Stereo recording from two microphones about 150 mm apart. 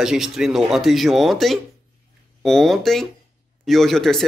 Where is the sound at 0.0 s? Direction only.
5° right (ahead or behind).